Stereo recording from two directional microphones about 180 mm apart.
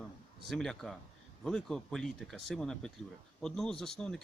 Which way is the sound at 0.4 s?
Centre (ahead or behind).